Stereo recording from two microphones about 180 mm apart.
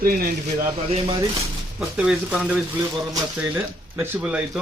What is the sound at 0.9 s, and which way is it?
Speech, 30° right (ahead or behind).